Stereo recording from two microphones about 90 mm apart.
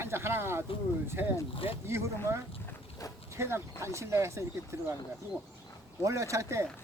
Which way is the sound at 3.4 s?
30° right (ahead or behind).